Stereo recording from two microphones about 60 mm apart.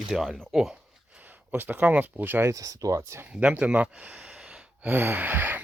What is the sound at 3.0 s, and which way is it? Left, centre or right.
Speech, right.